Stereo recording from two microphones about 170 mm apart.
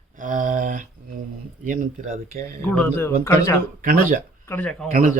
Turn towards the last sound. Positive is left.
turn(degrees=5)  # may be behind; listen again after turning